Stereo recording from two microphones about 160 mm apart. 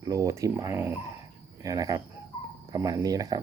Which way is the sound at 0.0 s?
20° right (ahead or behind).